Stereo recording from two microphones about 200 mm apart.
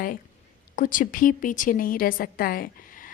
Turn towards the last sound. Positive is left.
turn(degrees=45)  # may be behind; listen again after turning